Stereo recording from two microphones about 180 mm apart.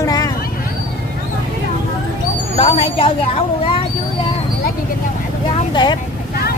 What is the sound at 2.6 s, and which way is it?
Speech, 30° left (ahead or behind).